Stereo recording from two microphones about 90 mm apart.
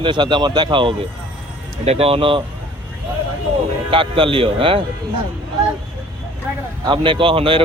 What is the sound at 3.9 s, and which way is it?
Speech, 75° right (ahead or behind).